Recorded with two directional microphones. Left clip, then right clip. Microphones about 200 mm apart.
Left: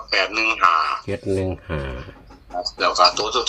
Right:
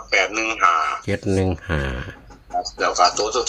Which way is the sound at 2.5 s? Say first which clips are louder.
Left 1 dB; centre (ahead or behind).